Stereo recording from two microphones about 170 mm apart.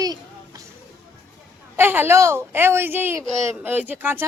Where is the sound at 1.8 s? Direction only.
15° right (ahead or behind).